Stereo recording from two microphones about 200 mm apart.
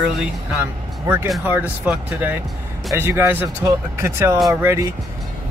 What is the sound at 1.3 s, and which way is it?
Speech, 10° right (ahead or behind).